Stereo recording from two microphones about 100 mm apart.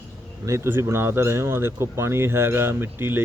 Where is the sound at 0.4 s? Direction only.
25° right (ahead or behind).